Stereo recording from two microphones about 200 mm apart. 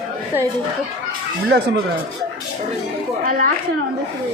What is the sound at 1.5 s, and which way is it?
Speech, 55° right (ahead or behind).